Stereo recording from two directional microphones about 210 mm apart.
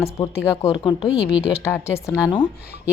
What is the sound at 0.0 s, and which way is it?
A woman's voice, 10° left (ahead or behind).